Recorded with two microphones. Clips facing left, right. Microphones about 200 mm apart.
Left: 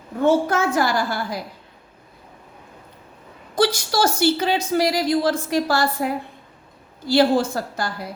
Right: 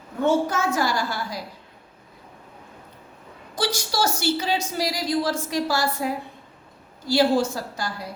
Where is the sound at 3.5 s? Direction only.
55° left (ahead or behind).